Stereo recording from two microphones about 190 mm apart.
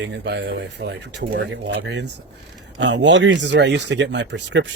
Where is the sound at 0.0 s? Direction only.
65° right (ahead or behind).